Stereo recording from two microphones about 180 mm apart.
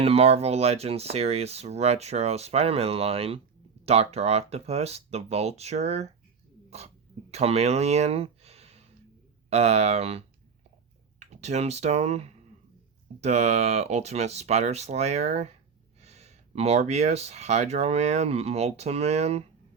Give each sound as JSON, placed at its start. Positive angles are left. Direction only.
{"t": 0.0, "sound": "speech", "side_deg": -35}
{"t": 6.7, "sound": "a sound", "side_deg": -35}
{"t": 9.5, "sound": "speech", "side_deg": -35}